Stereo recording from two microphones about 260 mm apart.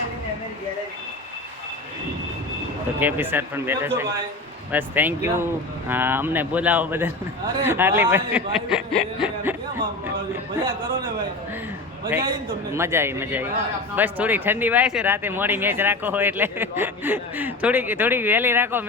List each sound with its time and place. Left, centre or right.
3.0 s speech: centre
10.6 s speech: centre
12.7 s speech: centre